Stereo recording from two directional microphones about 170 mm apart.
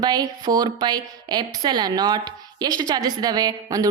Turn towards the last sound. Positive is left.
turn(degrees=-20)  # may be behind; listen again after turning